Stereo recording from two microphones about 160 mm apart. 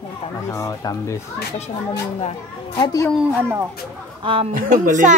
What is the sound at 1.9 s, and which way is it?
Speech, 35° left (ahead or behind).